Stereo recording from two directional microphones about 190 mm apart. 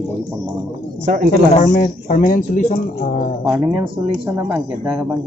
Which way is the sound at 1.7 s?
45° left (ahead or behind).